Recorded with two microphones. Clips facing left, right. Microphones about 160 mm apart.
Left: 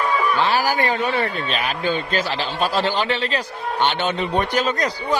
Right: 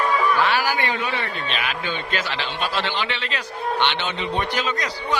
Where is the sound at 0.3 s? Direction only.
35° left (ahead or behind).